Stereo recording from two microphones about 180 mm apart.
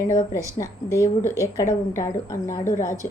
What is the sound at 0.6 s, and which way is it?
A woman's voice, 15° left (ahead or behind).